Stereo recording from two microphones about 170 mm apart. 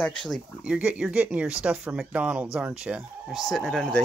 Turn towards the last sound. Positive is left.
turn(degrees=5)  # may be behind; listen again after turning